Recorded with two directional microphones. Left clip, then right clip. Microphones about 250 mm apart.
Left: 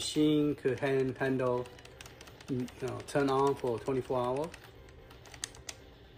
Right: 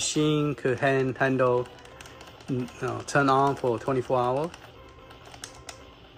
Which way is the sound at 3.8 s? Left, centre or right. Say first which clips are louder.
Right 7 dB; right.